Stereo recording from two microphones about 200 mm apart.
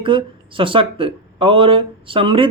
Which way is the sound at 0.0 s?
25° right (ahead or behind).